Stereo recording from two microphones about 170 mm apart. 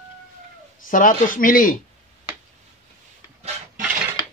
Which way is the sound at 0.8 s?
50° left (ahead or behind).